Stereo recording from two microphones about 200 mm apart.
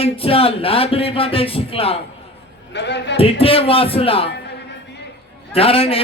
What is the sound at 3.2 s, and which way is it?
A man's voice, 30° left (ahead or behind).